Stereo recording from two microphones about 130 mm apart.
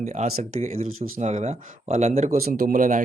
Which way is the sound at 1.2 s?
60° right (ahead or behind).